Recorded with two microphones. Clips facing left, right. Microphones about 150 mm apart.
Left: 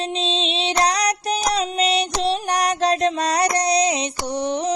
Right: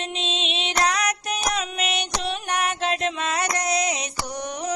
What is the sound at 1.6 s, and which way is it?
Music, 35° left (ahead or behind).